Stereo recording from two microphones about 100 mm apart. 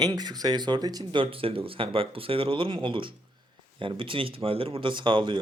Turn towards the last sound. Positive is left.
turn(degrees=-55)  # may be behind; listen again after turning